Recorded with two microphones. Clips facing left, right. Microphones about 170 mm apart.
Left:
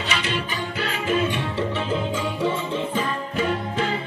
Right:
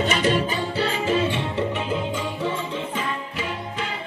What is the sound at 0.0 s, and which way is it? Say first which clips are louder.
Music: right 6 dB; 45° right (ahead or behind).